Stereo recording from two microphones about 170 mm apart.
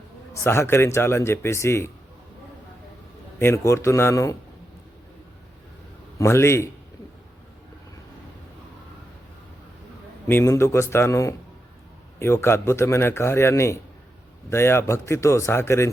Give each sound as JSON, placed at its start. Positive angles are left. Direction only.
{"t": 0.4, "sound": "a man's voice", "side_deg": 15}
{"t": 3.3, "sound": "a man's voice", "side_deg": 15}
{"t": 6.1, "sound": "a man's voice", "side_deg": 15}
{"t": 10.2, "sound": "a man's voice", "side_deg": 15}